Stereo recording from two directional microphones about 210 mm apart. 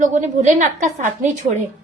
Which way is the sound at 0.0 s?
35° right (ahead or behind).